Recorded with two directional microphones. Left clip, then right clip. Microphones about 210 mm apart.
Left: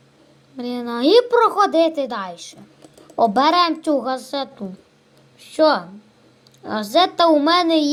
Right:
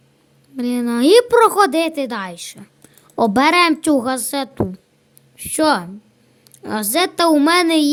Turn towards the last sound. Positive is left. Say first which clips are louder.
# right 2 dB
turn(degrees=-50)  # may be behind; listen again after turning